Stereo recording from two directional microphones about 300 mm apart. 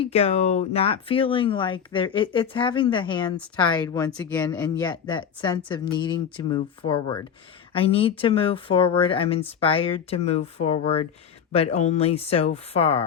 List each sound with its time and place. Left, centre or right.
0.0 s speech: centre